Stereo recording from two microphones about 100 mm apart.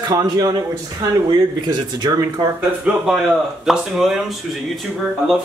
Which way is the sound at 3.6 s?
5° right (ahead or behind).